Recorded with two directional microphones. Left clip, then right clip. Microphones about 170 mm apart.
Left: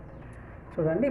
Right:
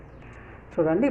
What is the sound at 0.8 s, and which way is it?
Speech, 20° right (ahead or behind).